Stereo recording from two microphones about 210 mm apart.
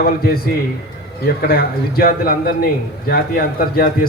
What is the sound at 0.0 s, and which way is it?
Speech, 45° left (ahead or behind).